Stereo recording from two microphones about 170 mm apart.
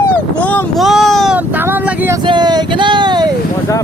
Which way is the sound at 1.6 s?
10° right (ahead or behind).